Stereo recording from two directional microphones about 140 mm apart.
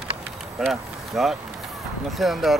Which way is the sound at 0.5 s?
Centre (ahead or behind).